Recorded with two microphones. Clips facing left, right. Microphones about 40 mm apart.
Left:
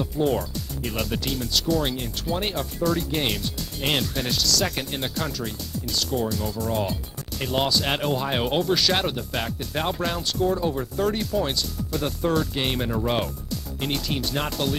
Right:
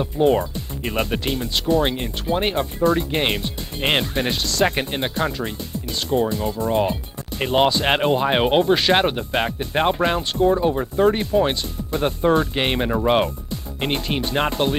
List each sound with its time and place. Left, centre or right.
0.0 s speech: right